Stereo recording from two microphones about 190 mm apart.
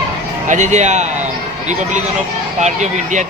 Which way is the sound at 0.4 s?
40° right (ahead or behind).